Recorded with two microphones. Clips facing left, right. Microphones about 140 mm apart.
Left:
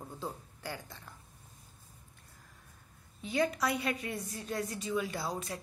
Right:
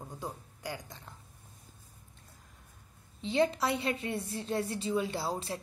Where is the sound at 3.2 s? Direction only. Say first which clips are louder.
Right 3 dB; 25° right (ahead or behind).